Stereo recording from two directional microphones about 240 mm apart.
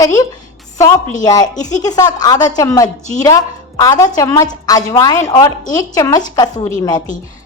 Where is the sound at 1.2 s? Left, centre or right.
Centre.